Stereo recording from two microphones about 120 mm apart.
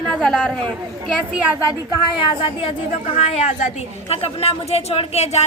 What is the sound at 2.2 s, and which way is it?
Speech, 45° left (ahead or behind).